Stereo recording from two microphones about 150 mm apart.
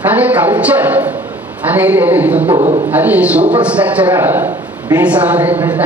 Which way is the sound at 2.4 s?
40° right (ahead or behind).